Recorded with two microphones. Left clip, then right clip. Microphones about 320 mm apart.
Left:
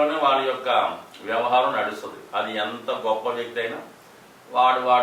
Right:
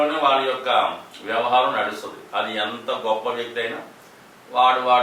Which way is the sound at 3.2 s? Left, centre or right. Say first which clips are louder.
Right 1 dB; centre.